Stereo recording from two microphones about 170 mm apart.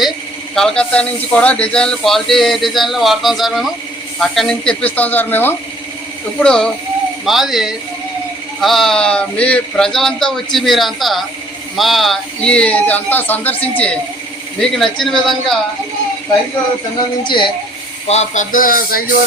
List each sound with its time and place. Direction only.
0.5 s speech: 5° left (ahead or behind)
17.2 s speech: 30° left (ahead or behind)
18.1 s speech: 45° left (ahead or behind)